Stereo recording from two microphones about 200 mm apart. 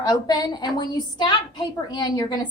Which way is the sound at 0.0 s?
20° left (ahead or behind).